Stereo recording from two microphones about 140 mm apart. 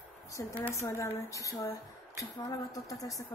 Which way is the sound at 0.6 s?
20° left (ahead or behind).